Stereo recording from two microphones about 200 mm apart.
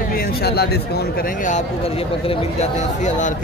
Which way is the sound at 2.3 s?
35° left (ahead or behind).